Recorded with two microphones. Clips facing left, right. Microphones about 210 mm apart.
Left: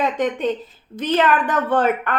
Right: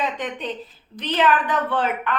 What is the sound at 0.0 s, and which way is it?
A woman's voice, 45° left (ahead or behind).